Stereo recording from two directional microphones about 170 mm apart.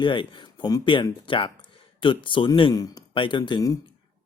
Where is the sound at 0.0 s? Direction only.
30° left (ahead or behind).